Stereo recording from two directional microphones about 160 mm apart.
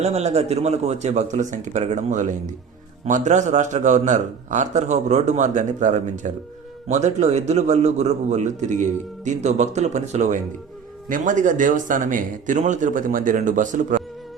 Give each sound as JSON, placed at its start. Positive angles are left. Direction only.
{"t": 0.0, "sound": "a man's voice", "side_deg": -45}